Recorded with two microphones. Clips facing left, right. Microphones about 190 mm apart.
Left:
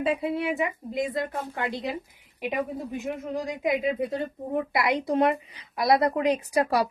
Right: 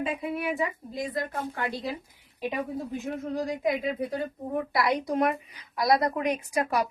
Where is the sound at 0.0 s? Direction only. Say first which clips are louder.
Left 4 dB; 30° left (ahead or behind).